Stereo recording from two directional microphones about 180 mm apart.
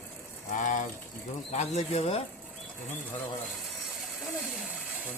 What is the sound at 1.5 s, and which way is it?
Speech, 35° left (ahead or behind).